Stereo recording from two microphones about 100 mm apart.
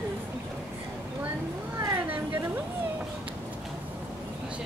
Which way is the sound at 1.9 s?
20° right (ahead or behind).